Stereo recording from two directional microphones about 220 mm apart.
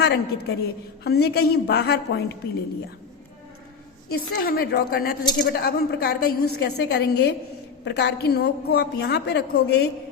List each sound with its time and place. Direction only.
0.0 s a woman's voice: 45° left (ahead or behind)
4.1 s a woman's voice: 45° left (ahead or behind)